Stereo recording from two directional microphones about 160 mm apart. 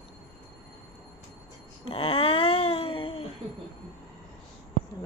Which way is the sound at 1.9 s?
35° left (ahead or behind).